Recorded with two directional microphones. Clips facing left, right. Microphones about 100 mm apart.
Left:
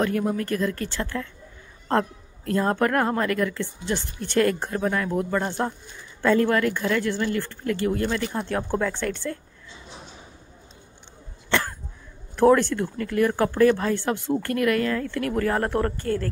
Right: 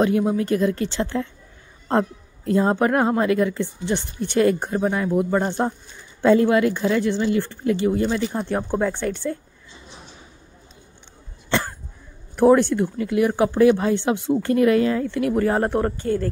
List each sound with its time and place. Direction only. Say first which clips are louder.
0.0 s speech: right 5 dB; 15° right (ahead or behind)
2.5 s speech: right 3 dB; 15° right (ahead or behind)
12.4 s speech: right 3 dB; 15° right (ahead or behind)